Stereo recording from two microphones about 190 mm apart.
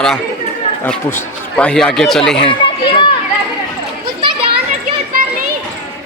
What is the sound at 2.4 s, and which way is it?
Run, 25° left (ahead or behind).